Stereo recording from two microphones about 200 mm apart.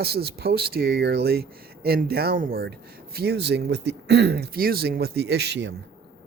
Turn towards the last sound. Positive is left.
turn(degrees=-60)  # may be behind; listen again after turning